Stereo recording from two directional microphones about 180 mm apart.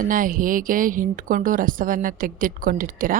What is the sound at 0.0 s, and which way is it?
A woman's voice, 50° right (ahead or behind).